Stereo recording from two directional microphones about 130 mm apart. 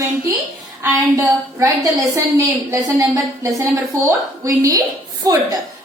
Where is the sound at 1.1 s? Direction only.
25° right (ahead or behind).